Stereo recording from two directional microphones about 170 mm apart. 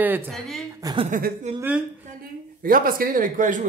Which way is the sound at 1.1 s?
50° right (ahead or behind).